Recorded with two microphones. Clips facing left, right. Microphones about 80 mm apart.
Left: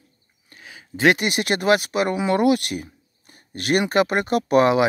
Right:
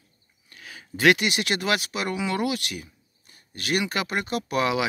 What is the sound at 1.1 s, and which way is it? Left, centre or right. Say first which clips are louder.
Speech: left 2 dB; left.